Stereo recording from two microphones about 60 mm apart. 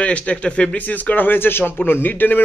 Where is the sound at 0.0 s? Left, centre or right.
Left.